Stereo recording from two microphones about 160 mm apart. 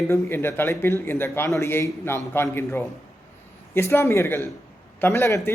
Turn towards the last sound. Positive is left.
turn(degrees=15)  # may be behind; listen again after turning